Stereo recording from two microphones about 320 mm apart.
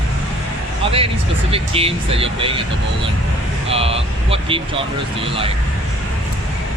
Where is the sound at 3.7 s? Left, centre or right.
Centre.